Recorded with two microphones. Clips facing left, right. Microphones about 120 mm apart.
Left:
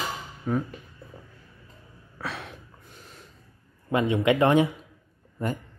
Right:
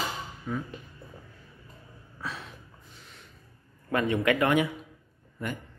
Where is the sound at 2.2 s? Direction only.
70° left (ahead or behind).